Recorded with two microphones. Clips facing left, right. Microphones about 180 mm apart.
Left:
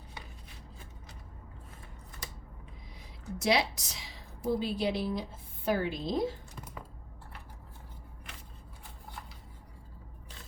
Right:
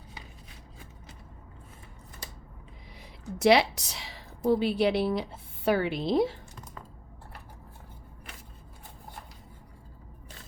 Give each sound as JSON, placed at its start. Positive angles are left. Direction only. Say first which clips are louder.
{"t": 3.0, "sound": "a woman's voice", "louder": "right 9 dB", "side_deg": -65}